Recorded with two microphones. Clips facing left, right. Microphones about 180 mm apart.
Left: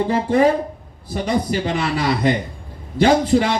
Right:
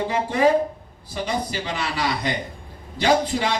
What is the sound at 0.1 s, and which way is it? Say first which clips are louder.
A man's voice: left 2 dB; 50° left (ahead or behind).